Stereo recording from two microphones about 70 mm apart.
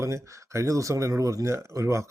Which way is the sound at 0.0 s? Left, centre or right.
Right.